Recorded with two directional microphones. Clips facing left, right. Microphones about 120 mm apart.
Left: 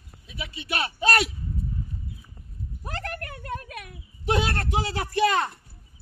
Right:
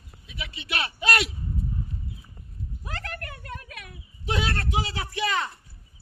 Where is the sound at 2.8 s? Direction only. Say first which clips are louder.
Left 3 dB; 45° left (ahead or behind).